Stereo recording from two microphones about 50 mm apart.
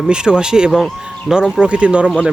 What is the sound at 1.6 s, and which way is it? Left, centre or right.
Speech, right.